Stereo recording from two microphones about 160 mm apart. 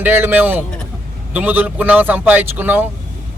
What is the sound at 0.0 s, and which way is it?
A man's voice, 15° right (ahead or behind).